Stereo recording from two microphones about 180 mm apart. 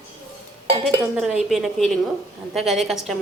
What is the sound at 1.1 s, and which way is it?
A woman's voice, 5° right (ahead or behind).